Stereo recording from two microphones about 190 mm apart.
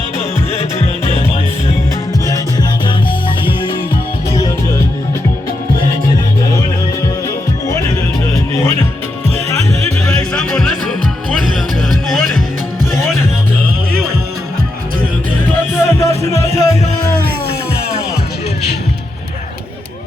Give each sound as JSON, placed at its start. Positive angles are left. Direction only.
{"t": 10.3, "sound": "music", "side_deg": 5}
{"t": 15.7, "sound": "music", "side_deg": 15}